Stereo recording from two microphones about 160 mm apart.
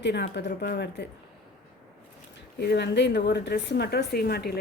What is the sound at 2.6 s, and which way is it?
A woman's voice, 90° left.